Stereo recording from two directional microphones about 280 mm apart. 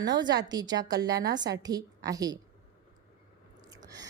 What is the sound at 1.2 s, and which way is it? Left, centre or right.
Speech, right.